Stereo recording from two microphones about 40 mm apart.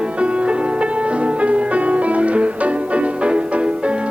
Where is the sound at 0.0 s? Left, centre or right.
Right.